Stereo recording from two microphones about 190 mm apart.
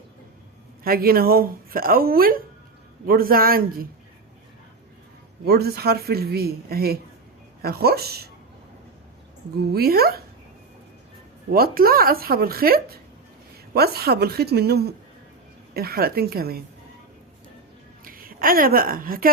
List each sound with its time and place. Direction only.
0.9 s speech: 50° right (ahead or behind)
5.5 s speech: 55° right (ahead or behind)
9.6 s speech: 55° right (ahead or behind)
11.5 s speech: 50° right (ahead or behind)
18.0 s a woman's voice: 50° right (ahead or behind)